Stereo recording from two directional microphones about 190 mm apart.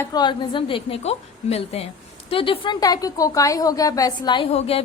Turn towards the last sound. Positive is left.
turn(degrees=30)  # may be behind; listen again after turning